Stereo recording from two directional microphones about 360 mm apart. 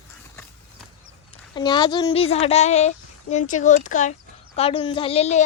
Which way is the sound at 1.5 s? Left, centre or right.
Centre.